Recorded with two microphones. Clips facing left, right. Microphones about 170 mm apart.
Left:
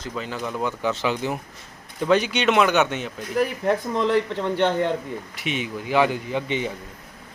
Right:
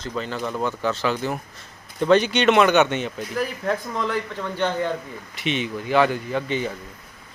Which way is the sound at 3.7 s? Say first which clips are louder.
Left 4 dB; 25° left (ahead or behind).